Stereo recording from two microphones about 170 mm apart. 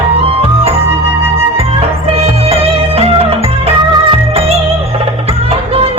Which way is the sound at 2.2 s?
35° right (ahead or behind).